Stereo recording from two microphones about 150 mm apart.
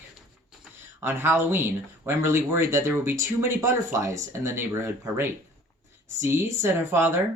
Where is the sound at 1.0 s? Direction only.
15° right (ahead or behind).